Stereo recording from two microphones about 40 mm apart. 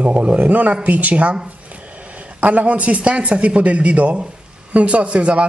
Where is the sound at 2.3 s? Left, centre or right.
Right.